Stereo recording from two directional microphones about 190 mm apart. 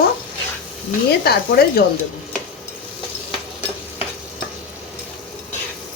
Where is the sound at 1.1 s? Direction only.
55° left (ahead or behind).